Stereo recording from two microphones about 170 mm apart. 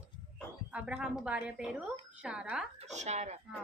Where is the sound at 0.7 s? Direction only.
5° right (ahead or behind).